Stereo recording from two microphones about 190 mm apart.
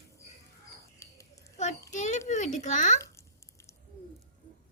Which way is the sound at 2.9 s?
15° left (ahead or behind).